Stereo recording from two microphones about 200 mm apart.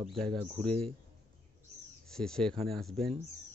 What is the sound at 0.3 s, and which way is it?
Speech, 30° right (ahead or behind).